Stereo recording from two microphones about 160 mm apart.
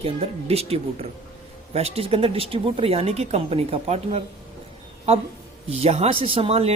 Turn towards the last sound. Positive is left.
turn(degrees=-40)  # may be behind; listen again after turning